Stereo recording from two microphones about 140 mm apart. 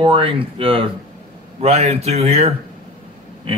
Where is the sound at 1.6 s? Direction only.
50° right (ahead or behind).